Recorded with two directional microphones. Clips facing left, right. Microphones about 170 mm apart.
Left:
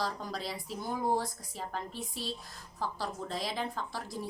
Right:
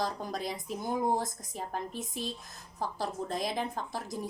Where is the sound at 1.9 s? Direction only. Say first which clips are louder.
Right 2 dB; 45° right (ahead or behind).